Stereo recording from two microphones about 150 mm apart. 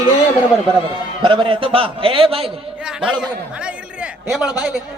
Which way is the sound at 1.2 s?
35° right (ahead or behind).